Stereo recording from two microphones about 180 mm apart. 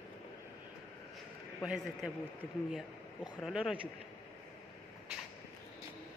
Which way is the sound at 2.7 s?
Centre (ahead or behind).